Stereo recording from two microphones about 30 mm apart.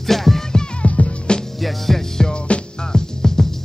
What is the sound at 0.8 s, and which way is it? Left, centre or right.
Music, left.